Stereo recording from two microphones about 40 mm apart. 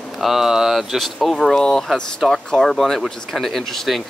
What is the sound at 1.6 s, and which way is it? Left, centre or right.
Speech, centre.